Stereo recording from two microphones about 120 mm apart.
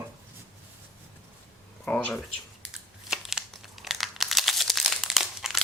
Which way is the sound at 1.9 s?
10° left (ahead or behind).